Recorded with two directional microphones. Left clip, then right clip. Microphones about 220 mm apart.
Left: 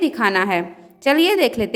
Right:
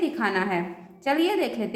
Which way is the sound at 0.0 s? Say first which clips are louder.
Left 7 dB; 45° left (ahead or behind).